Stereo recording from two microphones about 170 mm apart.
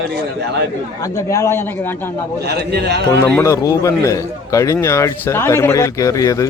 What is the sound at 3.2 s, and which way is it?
A man's voice, 15° left (ahead or behind).